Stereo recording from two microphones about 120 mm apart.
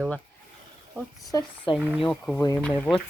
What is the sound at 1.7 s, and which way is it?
Speech, 45° left (ahead or behind).